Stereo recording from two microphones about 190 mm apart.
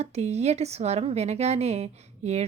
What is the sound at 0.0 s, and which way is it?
A woman's voice, 35° right (ahead or behind).